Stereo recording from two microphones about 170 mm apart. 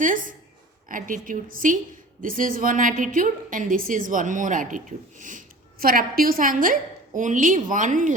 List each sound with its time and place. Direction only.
0.0 s a woman's voice: 50° right (ahead or behind)